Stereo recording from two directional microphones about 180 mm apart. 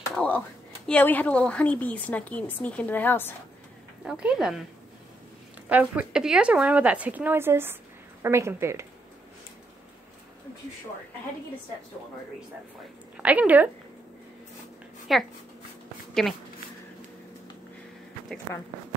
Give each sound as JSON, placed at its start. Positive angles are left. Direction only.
{"t": 0.1, "sound": "a woman's voice", "side_deg": 5}
{"t": 4.0, "sound": "speech", "side_deg": -5}
{"t": 5.7, "sound": "speech", "side_deg": -10}
{"t": 13.2, "sound": "speech", "side_deg": -10}
{"t": 15.1, "sound": "speech", "side_deg": 0}